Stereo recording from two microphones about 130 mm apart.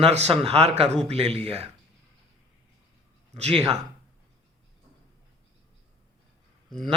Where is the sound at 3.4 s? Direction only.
55° right (ahead or behind).